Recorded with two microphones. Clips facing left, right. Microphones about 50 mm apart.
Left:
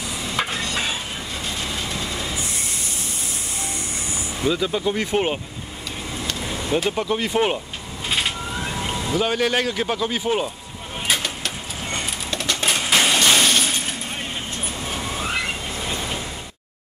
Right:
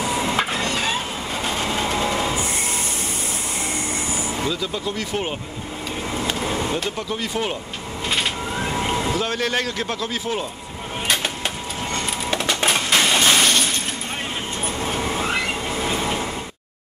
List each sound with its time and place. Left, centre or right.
0.0 s a sound: right
0.4 s a sound: centre
1.3 s vehicle: right
4.5 s speech: centre
6.2 s vehicle: right
6.7 s speech: centre
8.6 s vehicle: centre
9.1 s speech: centre
12.3 s splinter: right
12.8 s vehicle: centre
15.0 s train: centre